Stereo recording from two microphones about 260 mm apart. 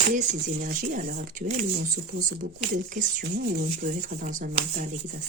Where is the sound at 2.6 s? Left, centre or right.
Right.